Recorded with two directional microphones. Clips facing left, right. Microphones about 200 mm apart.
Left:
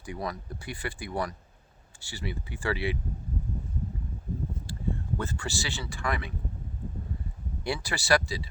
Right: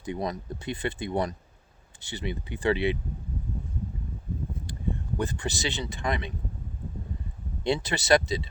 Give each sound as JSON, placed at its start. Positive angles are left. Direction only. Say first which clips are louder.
{"t": 0.0, "sound": "speech", "louder": "right 4 dB", "side_deg": -20}
{"t": 5.1, "sound": "speech", "louder": "right 3 dB", "side_deg": -15}
{"t": 7.6, "sound": "speech", "louder": "right 5 dB", "side_deg": -20}